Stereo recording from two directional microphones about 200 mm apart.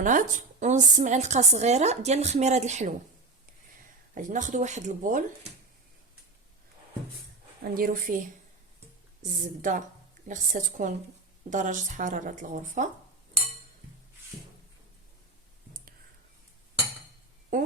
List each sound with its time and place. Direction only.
0.0 s a woman's voice: 40° right (ahead or behind)
4.1 s a woman's voice: 40° right (ahead or behind)
7.6 s a woman's voice: 45° right (ahead or behind)
9.6 s a woman's voice: 40° right (ahead or behind)
17.5 s speech: 40° right (ahead or behind)